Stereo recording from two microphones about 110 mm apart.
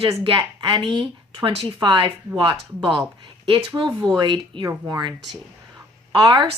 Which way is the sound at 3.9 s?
25° right (ahead or behind).